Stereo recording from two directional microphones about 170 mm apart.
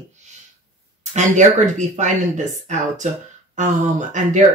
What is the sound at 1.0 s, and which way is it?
Speech, 45° right (ahead or behind).